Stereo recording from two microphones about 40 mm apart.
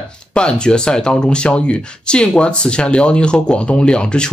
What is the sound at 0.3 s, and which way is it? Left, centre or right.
Speech, left.